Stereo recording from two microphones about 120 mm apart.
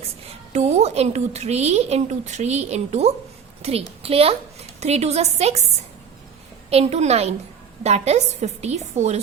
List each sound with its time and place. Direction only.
0.5 s a woman's voice: 65° right (ahead or behind)
6.7 s a woman's voice: 60° right (ahead or behind)